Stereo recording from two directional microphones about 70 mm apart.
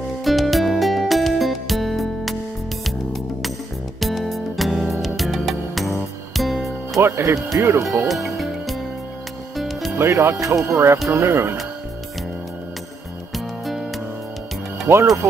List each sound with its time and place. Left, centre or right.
0.2 s music: centre
4.0 s music: centre
7.0 s speech: right
8.1 s music: centre
9.9 s speech: right
14.9 s speech: right